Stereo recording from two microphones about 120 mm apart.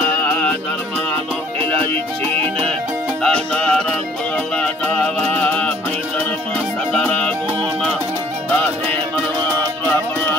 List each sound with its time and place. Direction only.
0.3 s music: 10° left (ahead or behind)
1.6 s music: 50° right (ahead or behind)
3.2 s music: 10° left (ahead or behind)